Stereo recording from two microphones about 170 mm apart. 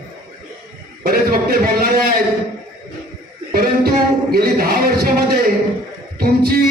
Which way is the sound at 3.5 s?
60° right (ahead or behind).